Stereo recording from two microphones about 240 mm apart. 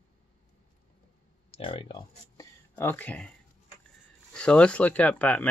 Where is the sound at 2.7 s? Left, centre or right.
Centre.